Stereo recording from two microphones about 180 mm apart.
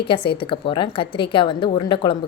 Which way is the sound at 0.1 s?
30° left (ahead or behind).